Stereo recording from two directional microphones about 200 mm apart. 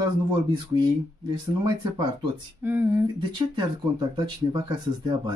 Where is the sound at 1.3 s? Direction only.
25° right (ahead or behind).